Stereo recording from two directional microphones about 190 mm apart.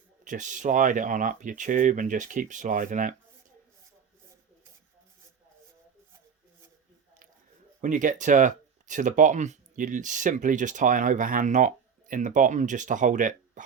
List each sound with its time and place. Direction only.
0.3 s speech: 40° right (ahead or behind)
7.8 s speech: 45° right (ahead or behind)